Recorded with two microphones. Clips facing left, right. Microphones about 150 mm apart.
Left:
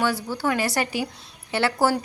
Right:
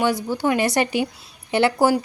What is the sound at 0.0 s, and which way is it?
A woman's voice, 15° right (ahead or behind).